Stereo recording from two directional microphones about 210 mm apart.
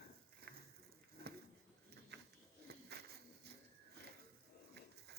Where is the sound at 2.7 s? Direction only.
50° right (ahead or behind).